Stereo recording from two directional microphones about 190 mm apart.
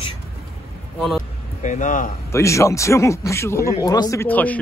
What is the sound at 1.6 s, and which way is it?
Speech, 40° left (ahead or behind).